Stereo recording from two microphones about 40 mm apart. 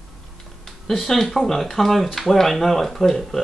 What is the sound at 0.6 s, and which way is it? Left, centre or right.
Speech, centre.